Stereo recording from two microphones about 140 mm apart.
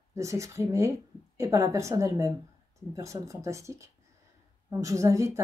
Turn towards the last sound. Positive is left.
turn(degrees=-20)  # may be behind; listen again after turning